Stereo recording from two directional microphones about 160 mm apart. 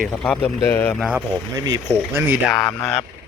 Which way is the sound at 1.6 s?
25° right (ahead or behind).